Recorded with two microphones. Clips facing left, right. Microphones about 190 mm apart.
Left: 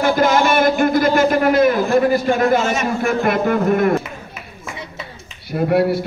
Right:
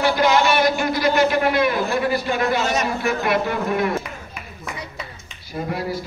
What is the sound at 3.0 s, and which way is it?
Speech, 50° left (ahead or behind).